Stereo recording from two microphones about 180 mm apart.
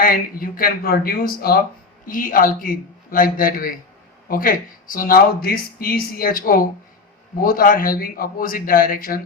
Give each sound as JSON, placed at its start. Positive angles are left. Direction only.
{"t": 0.0, "sound": "speech", "side_deg": 55}